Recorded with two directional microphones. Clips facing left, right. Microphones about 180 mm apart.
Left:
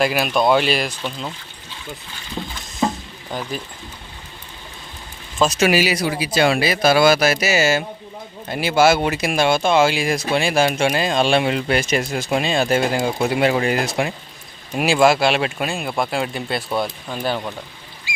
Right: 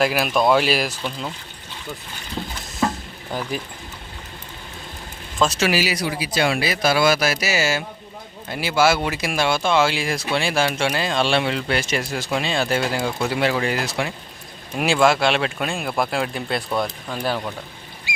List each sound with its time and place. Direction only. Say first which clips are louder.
0.0 s speech: left 1 dB; centre (ahead or behind)
2.8 s chop: left 1 dB; 20° left (ahead or behind)
3.3 s speech: even; 10° right (ahead or behind)
5.4 s speech: left 3 dB; 15° left (ahead or behind)
6.7 s speech: left 4 dB; 65° left (ahead or behind)
7.3 s speech: left 4 dB; 20° left (ahead or behind)
14.8 s speech: left 2 dB; 10° left (ahead or behind)
15.7 s speech: left 1 dB; centre (ahead or behind)